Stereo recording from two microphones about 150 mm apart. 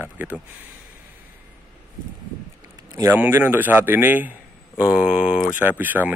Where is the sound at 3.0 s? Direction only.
15° right (ahead or behind).